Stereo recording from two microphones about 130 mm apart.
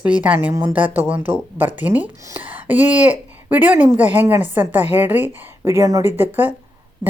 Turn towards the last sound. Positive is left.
turn(degrees=-15)  # may be behind; listen again after turning